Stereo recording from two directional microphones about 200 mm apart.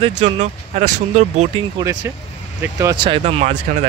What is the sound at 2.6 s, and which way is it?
Speech, 20° right (ahead or behind).